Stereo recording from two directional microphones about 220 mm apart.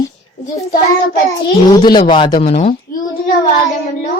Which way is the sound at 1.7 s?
20° left (ahead or behind).